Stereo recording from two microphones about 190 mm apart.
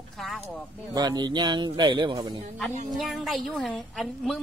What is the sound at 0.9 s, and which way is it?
Speech, 20° right (ahead or behind).